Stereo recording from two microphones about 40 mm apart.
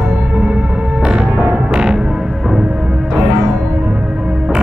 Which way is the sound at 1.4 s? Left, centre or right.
Right.